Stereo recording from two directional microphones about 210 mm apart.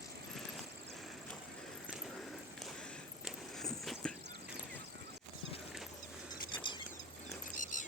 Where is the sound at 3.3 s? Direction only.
Centre (ahead or behind).